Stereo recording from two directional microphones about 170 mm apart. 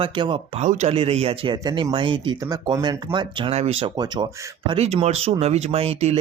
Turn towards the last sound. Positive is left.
turn(degrees=-35)  # may be behind; listen again after turning